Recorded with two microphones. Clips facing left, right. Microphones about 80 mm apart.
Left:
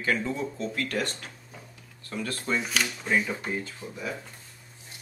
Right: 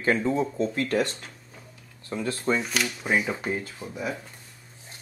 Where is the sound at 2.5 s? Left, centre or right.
Centre.